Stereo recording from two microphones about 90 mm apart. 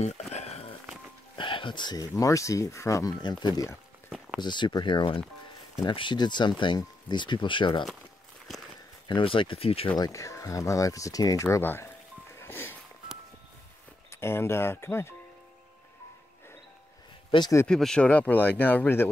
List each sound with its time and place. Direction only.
1.3 s music: 65° left (ahead or behind)
2.0 s speech: 40° left (ahead or behind)
3.2 s speech: 55° left (ahead or behind)
9.0 s speech: 70° left (ahead or behind); by 9.9 s 90° left
9.9 s speech: 40° left (ahead or behind)
11.4 s speech: 25° left (ahead or behind)
12.4 s a sound: 25° left (ahead or behind)
14.2 s speech: 25° left (ahead or behind)
17.3 s speech: 80° left
17.6 s speech: 5° left (ahead or behind); by 19.0 s 25° left (ahead or behind)